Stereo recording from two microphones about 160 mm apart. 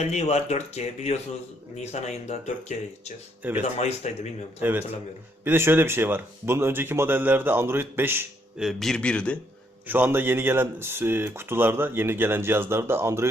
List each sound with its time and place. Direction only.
0.0 s speech: 45° left (ahead or behind)
3.4 s speech: 10° right (ahead or behind)
3.8 s speech: 45° left (ahead or behind)
5.5 s speech: 15° right (ahead or behind)
8.6 s a man's voice: centre (ahead or behind)
9.8 s speech: 10° right (ahead or behind)